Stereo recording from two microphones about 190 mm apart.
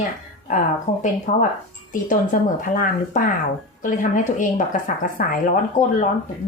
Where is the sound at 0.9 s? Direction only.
35° left (ahead or behind).